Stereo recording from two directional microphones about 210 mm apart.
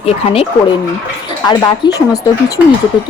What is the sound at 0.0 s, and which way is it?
Speech, 30° left (ahead or behind).